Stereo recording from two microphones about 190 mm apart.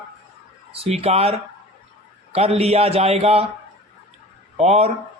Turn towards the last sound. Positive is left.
turn(degrees=-35)  # may be behind; listen again after turning